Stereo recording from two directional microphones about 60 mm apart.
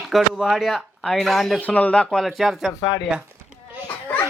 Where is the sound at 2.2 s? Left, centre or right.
Centre.